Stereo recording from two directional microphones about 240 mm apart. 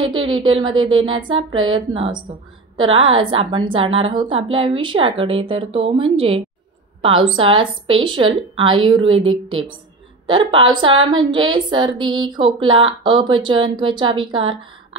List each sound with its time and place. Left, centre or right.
0.2 s a woman's voice: right
11.0 s speech: right
11.3 s speech: centre